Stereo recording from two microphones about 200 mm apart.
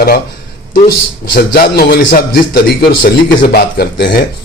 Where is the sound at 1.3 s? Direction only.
50° left (ahead or behind).